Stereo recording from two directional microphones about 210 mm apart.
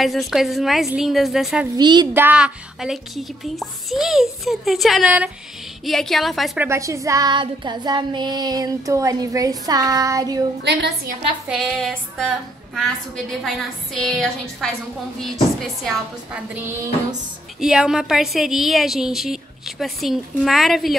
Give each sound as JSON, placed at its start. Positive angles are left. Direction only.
{"t": 0.0, "sound": "a woman's voice", "side_deg": 0}
{"t": 1.8, "sound": "a woman's voice", "side_deg": -20}
{"t": 2.1, "sound": "a woman's voice", "side_deg": -5}
{"t": 6.7, "sound": "child singing", "side_deg": -15}
{"t": 10.6, "sound": "a woman's voice", "side_deg": -55}
{"t": 11.4, "sound": "a woman's voice", "side_deg": -5}
{"t": 17.6, "sound": "a woman's voice", "side_deg": -5}